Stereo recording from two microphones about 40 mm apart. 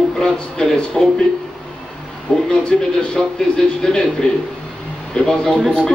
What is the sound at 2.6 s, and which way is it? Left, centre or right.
Speech, left.